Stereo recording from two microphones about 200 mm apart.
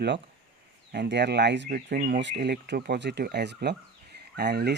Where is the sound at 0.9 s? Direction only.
60° right (ahead or behind).